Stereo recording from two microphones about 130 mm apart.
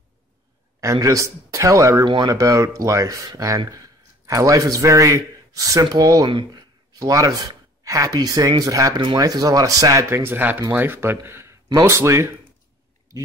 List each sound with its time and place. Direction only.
1.0 s speech: 25° right (ahead or behind)